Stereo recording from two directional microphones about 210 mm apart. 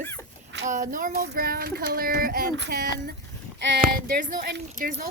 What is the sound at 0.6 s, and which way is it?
Child singing, 35° right (ahead or behind).